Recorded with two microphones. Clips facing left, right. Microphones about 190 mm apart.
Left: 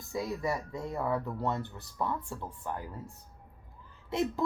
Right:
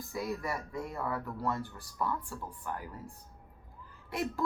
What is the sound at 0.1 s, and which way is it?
Speech, 25° left (ahead or behind).